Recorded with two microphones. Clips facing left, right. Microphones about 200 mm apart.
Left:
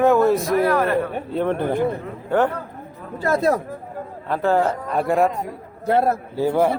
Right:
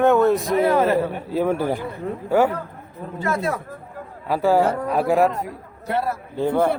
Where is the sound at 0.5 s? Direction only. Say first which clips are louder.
Right 1 dB; 25° right (ahead or behind).